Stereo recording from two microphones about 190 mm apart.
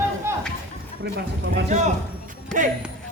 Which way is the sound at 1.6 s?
35° right (ahead or behind).